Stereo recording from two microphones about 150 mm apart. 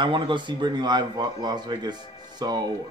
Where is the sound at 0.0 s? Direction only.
30° right (ahead or behind).